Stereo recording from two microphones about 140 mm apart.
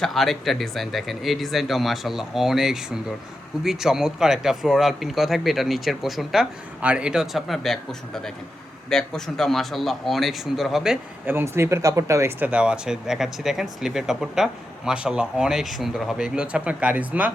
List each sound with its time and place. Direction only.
0.0 s speech: centre (ahead or behind)
11.3 s speech: 15° right (ahead or behind)
12.5 s speech: 5° right (ahead or behind)